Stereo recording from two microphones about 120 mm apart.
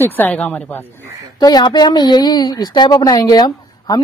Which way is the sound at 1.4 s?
35° left (ahead or behind).